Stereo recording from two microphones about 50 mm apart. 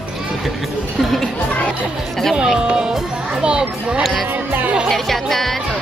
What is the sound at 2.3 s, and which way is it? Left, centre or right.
A child's voice, centre.